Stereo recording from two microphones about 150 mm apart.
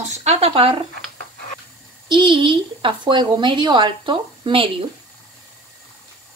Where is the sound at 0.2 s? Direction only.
45° right (ahead or behind).